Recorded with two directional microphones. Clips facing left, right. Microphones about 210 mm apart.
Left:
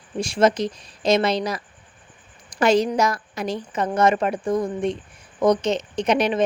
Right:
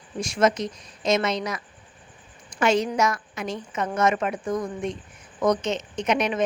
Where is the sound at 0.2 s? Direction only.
30° left (ahead or behind).